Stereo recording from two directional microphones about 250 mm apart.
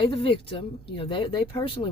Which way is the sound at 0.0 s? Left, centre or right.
Left.